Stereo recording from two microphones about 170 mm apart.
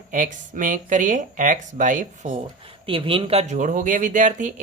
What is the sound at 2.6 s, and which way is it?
Speech, 30° right (ahead or behind).